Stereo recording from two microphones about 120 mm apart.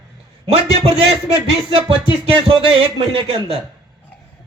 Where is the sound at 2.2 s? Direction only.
50° right (ahead or behind).